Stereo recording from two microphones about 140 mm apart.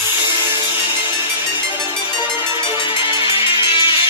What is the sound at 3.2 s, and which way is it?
Music, 35° left (ahead or behind).